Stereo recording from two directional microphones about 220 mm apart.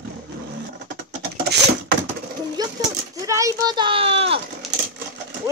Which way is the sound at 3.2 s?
15° right (ahead or behind).